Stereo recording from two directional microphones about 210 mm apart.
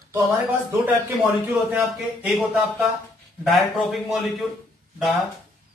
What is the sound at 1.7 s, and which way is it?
A man's voice, centre (ahead or behind).